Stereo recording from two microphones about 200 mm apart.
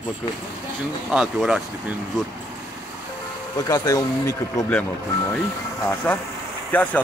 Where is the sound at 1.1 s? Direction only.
5° right (ahead or behind).